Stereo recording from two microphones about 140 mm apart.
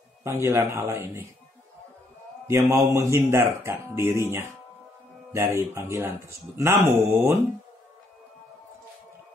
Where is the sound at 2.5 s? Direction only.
20° right (ahead or behind).